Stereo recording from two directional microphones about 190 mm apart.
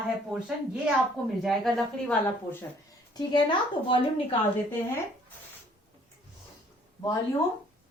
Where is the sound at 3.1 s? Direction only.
20° left (ahead or behind).